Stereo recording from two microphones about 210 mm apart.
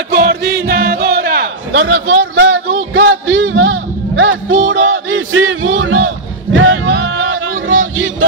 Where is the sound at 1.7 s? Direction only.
75° right (ahead or behind).